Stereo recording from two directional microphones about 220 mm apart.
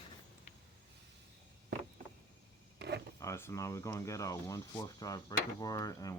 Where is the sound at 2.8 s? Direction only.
50° right (ahead or behind).